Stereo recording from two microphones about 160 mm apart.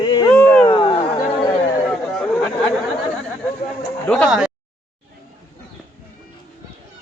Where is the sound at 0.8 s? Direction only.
30° left (ahead or behind).